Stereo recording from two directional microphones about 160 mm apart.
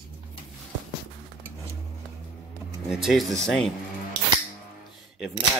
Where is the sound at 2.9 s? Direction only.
Centre (ahead or behind).